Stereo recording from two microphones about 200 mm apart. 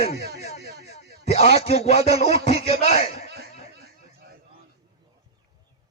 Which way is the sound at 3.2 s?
55° right (ahead or behind).